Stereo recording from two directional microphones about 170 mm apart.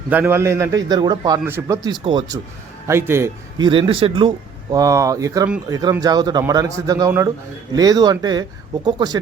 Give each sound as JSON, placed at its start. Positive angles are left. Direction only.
{"t": 0.1, "sound": "a man's voice", "side_deg": -10}
{"t": 2.8, "sound": "a man's voice", "side_deg": -15}
{"t": 3.6, "sound": "speech", "side_deg": -30}